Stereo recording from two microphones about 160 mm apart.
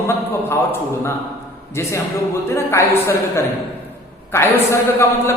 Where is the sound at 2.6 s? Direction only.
15° left (ahead or behind).